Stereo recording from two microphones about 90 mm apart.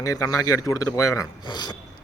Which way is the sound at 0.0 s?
40° left (ahead or behind).